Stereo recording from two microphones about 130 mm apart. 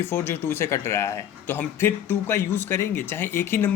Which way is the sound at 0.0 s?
20° left (ahead or behind).